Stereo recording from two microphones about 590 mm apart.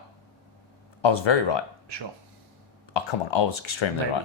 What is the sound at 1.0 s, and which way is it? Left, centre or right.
Speech, left.